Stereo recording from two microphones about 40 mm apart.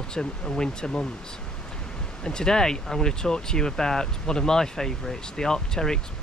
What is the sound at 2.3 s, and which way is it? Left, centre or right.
Speech, centre.